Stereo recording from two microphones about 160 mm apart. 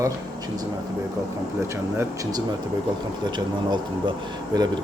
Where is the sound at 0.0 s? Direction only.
25° right (ahead or behind).